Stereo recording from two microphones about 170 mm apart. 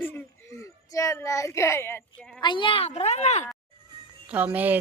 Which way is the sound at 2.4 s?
30° left (ahead or behind).